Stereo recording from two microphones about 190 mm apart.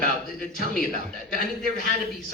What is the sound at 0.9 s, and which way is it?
Speech, 50° right (ahead or behind).